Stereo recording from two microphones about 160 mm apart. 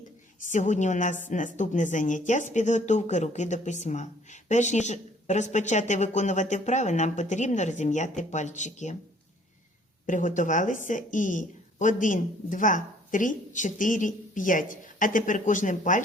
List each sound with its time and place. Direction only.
0.3 s speech: 50° left (ahead or behind)
10.1 s speech: 50° left (ahead or behind)